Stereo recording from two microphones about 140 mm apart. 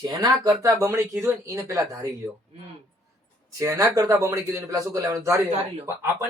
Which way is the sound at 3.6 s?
20° right (ahead or behind).